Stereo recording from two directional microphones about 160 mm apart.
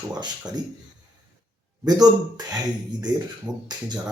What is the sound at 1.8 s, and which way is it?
Speech, 25° right (ahead or behind).